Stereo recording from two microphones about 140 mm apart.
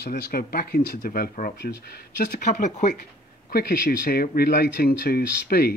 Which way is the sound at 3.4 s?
90° left.